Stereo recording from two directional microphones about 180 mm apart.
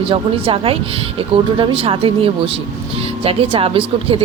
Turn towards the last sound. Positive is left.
turn(degrees=-30)  # may be behind; listen again after turning